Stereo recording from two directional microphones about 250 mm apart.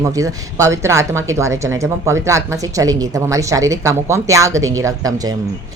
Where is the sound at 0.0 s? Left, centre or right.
Centre.